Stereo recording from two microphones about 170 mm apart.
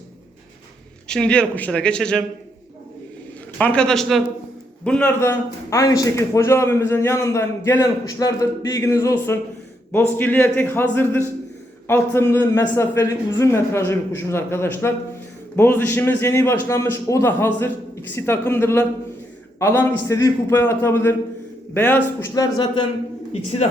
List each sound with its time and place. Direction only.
1.0 s a man's voice: 5° left (ahead or behind)
3.6 s a man's voice: 5° left (ahead or behind)
22.4 s speech: 25° left (ahead or behind)
23.3 s a man's voice: 40° left (ahead or behind)